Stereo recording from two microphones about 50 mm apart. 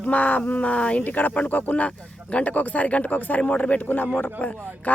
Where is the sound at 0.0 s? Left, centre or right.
Left.